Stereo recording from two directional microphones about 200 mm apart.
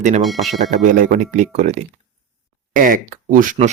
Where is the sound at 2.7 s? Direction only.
40° right (ahead or behind).